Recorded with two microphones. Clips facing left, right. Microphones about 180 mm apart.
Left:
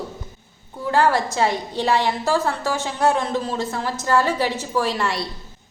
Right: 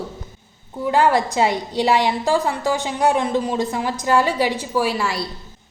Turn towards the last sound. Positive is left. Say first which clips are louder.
# right 1 dB
turn(degrees=-5)  # may be behind; listen again after turning